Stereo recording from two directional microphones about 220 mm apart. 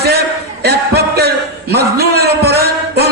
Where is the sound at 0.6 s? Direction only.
45° right (ahead or behind).